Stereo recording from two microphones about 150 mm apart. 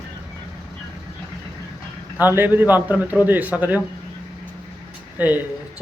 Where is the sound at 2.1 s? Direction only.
15° right (ahead or behind).